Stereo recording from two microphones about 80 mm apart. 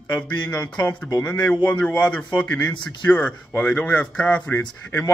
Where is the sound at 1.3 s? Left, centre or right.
Left.